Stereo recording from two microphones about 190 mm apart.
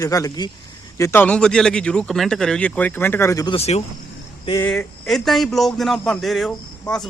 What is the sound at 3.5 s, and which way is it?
Speech, 35° left (ahead or behind).